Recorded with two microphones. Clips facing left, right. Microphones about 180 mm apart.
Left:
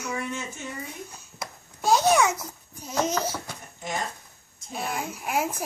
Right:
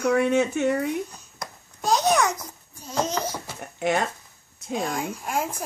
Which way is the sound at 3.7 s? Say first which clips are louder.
Right 9 dB; 70° right (ahead or behind).